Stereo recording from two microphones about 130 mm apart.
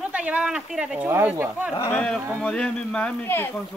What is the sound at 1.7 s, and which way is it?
Speech, 20° left (ahead or behind).